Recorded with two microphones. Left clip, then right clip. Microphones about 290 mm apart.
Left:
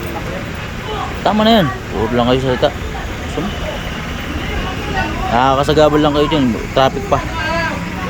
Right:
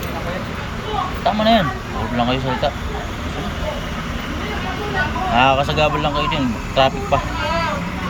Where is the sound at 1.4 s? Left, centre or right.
Left.